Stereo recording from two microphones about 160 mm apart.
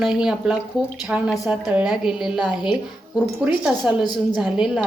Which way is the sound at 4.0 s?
25° left (ahead or behind).